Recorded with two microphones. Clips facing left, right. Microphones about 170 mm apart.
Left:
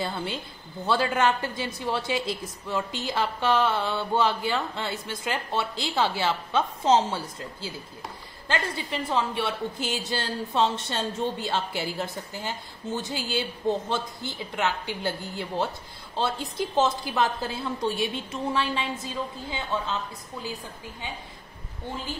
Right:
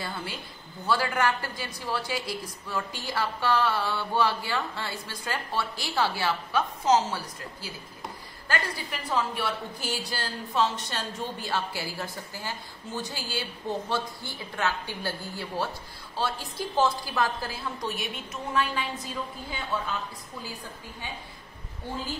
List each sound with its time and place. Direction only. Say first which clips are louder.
0.0 s a woman's voice: left 5 dB; 25° left (ahead or behind)